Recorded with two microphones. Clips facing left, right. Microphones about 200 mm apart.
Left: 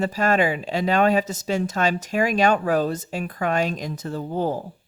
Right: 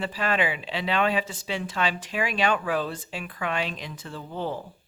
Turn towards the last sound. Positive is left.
turn(degrees=40)  # may be behind; listen again after turning